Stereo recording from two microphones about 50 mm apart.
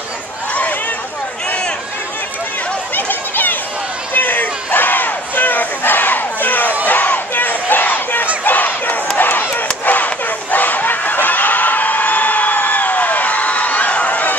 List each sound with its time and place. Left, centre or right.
2.9 s chatter: left
4.1 s battle cry: left
9.1 s a sound: left
9.8 s crowd: left